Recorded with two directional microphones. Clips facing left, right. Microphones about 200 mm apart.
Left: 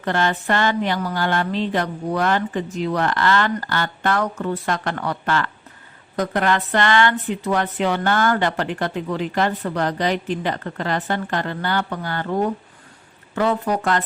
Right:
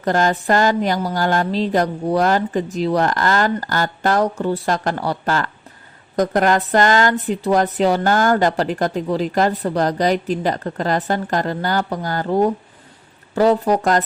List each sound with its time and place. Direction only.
0.0 s speech: 40° right (ahead or behind)